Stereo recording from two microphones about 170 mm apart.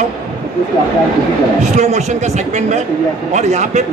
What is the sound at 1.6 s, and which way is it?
Speech, 40° right (ahead or behind).